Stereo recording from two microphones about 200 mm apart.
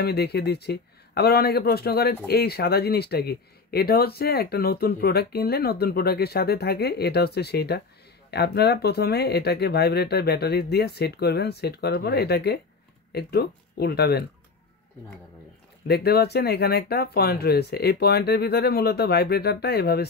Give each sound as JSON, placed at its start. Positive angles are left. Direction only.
{"t": 0.0, "sound": "speech", "side_deg": 55}
{"t": 15.9, "sound": "speech", "side_deg": 50}